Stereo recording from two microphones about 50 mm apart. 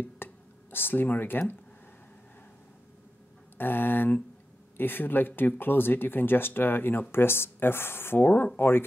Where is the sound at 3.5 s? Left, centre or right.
Left.